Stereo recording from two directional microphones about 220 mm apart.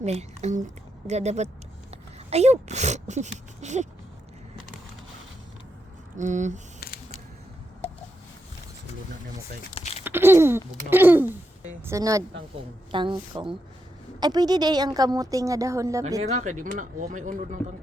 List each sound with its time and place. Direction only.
0.0 s speech: 30° right (ahead or behind)
6.1 s speech: 35° right (ahead or behind)
6.7 s a sound: 45° left (ahead or behind)
9.7 s a sound: 25° left (ahead or behind)
10.0 s a woman's voice: 10° right (ahead or behind)
16.2 s speech: 35° right (ahead or behind)